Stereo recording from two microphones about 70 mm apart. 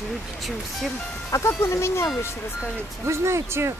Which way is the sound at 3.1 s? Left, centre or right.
Right.